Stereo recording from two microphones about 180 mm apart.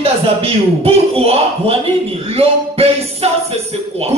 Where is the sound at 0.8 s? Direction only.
35° right (ahead or behind).